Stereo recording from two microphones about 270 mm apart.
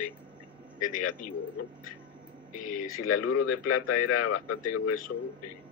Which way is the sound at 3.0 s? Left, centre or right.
Left.